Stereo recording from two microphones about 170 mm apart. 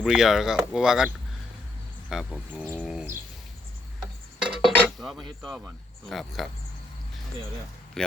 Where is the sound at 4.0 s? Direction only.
Centre (ahead or behind).